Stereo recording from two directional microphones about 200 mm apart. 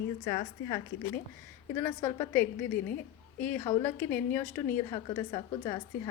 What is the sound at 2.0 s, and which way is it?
A woman's voice, 10° left (ahead or behind).